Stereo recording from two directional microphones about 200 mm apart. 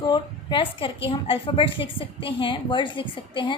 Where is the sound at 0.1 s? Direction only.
25° left (ahead or behind).